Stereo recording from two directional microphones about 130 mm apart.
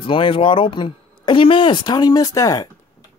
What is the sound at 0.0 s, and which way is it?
Speech, 40° left (ahead or behind).